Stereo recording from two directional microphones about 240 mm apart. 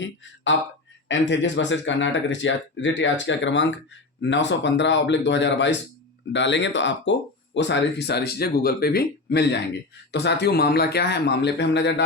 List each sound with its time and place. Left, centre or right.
0.5 s speech: left